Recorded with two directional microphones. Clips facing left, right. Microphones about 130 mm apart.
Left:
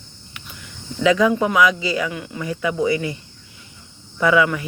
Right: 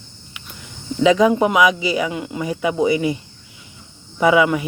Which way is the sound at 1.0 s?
20° right (ahead or behind).